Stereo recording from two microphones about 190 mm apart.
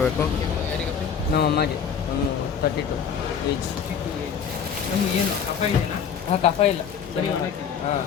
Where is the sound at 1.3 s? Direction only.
60° left (ahead or behind).